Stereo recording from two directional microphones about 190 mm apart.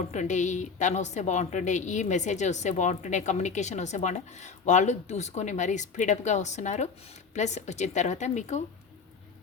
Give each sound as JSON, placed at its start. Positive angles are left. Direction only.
{"t": 0.1, "sound": "a woman's voice", "side_deg": 40}